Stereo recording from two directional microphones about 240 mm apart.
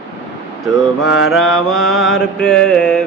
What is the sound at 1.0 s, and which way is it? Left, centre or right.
Mantra, left.